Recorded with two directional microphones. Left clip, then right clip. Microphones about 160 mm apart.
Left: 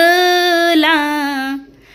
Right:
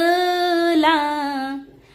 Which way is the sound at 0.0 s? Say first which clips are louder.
Left 7 dB; 15° left (ahead or behind).